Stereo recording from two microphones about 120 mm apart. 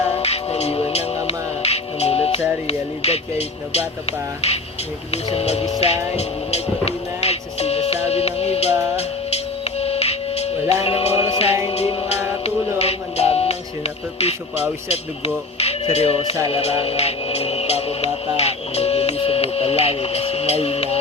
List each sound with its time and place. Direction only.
0.2 s music: 60° left (ahead or behind)
2.6 s speech: 60° left (ahead or behind)
5.1 s music: 60° left (ahead or behind)
15.5 s music: 60° left (ahead or behind)